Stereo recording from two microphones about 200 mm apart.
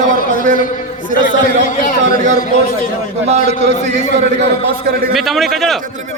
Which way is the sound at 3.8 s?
35° right (ahead or behind).